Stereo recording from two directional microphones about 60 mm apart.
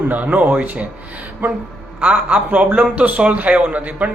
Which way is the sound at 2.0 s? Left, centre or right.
Right.